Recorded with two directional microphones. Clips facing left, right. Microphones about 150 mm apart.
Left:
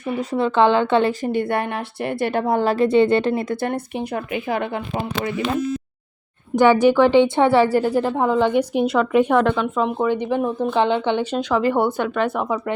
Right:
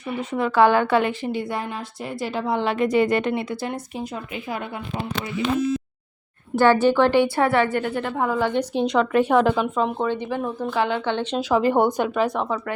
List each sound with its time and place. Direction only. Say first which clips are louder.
0.2 s a woman's voice: even; 30° left (ahead or behind)
1.2 s a woman's voice: left 5 dB; 55° left (ahead or behind); by 3.4 s 30° left (ahead or behind)
3.5 s speech: left 5 dB; 55° left (ahead or behind); by 4.8 s 70° left (ahead or behind)
6.6 s a woman's voice: left 3 dB; 15° left (ahead or behind)
7.6 s a woman's voice: left 5 dB; 35° left (ahead or behind); by 9.0 s 5° left (ahead or behind)
9.3 s speech: left 1 dB; 5° right (ahead or behind)
10.1 s a woman's voice: left 5 dB; 20° left (ahead or behind)
11.3 s speech: right 3 dB; 10° right (ahead or behind)
12.2 s a woman's voice: left 3 dB; 5° left (ahead or behind)